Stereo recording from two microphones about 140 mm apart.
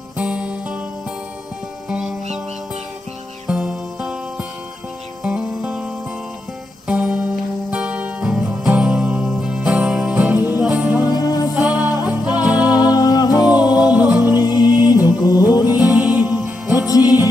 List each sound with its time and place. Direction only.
0.2 s music: 10° right (ahead or behind)
1.9 s music: 5° right (ahead or behind)
3.4 s music: 5° right (ahead or behind)
6.9 s music: 10° right (ahead or behind)
11.1 s music: 30° left (ahead or behind)
11.5 s music: 5° right (ahead or behind)
12.7 s music: 30° left (ahead or behind)
13.8 s music: 5° right (ahead or behind)
14.4 s music: 30° left (ahead or behind)
15.9 s music: 10° right (ahead or behind)
16.7 s music: 25° left (ahead or behind)